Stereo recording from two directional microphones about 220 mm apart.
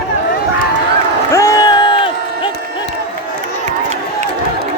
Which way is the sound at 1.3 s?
15° left (ahead or behind).